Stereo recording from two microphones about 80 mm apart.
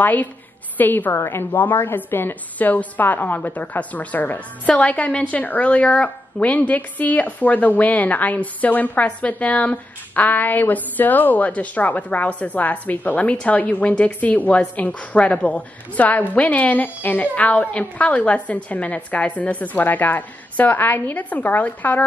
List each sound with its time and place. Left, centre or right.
0.0 s a woman's voice: left